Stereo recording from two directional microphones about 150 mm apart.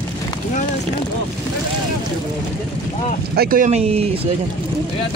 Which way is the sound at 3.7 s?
45° right (ahead or behind).